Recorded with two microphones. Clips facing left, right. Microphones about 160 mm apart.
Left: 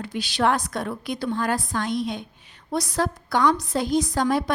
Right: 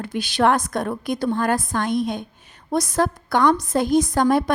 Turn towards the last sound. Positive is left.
turn(degrees=-50)  # may be behind; listen again after turning